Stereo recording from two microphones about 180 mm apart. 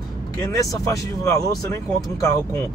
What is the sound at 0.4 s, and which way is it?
Speech, 20° left (ahead or behind).